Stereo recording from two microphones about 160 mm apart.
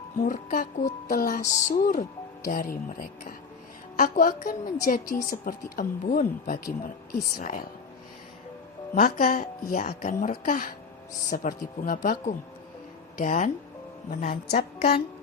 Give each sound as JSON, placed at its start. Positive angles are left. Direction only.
{"t": 0.2, "sound": "speech", "side_deg": 60}
{"t": 9.0, "sound": "speech", "side_deg": 60}